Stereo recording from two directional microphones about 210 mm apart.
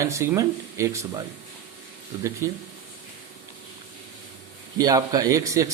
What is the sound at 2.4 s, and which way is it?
Speech, 15° right (ahead or behind).